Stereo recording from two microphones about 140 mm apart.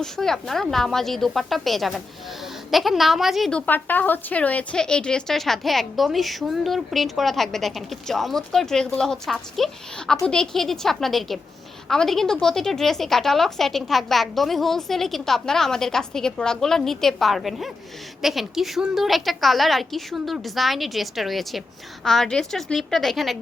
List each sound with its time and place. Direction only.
0.0 s a woman's voice: 5° left (ahead or behind)
3.7 s a woman's voice: 15° left (ahead or behind)